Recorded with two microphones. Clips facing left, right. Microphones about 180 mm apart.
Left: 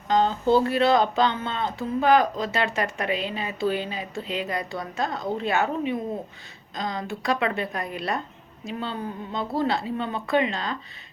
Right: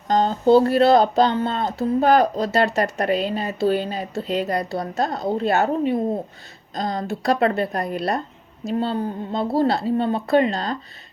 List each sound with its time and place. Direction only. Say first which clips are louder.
0.1 s speech: right 5 dB; 40° right (ahead or behind)